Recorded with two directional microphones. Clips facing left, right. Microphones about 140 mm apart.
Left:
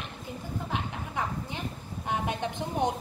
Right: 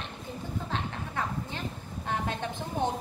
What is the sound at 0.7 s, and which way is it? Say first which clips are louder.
A woman's voice: left 1 dB; 15° left (ahead or behind).